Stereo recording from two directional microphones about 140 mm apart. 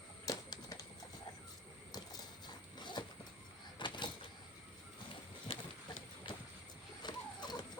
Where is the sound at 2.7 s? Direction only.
30° left (ahead or behind).